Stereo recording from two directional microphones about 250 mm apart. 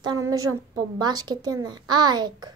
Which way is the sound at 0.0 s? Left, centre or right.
Centre.